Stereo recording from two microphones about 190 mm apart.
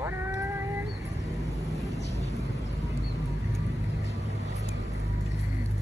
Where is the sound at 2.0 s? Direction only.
35° left (ahead or behind).